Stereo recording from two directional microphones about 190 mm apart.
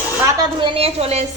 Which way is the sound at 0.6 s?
30° right (ahead or behind).